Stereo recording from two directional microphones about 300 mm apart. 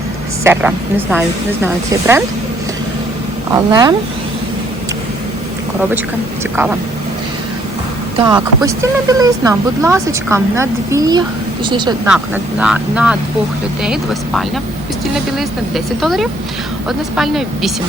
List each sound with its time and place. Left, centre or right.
0.4 s speech: centre
3.5 s speech: centre
8.2 s speech: centre
12.0 s speech: centre